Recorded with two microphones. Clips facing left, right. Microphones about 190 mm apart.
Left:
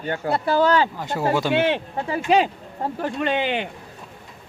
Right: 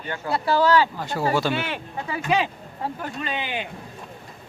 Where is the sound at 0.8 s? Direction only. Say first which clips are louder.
Left 1 dB; 20° left (ahead or behind).